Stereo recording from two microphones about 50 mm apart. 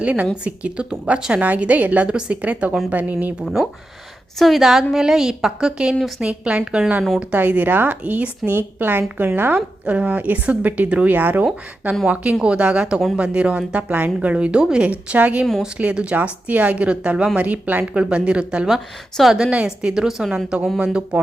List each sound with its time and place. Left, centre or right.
0.0 s speech: right
4.4 s a woman's voice: centre
4.6 s a woman's voice: centre
7.3 s speech: right
8.4 s speech: right
9.6 s speech: right
14.8 s speech: right
18.1 s a woman's voice: right
20.7 s speech: right